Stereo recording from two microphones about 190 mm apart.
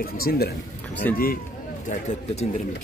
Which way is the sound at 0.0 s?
55° left (ahead or behind).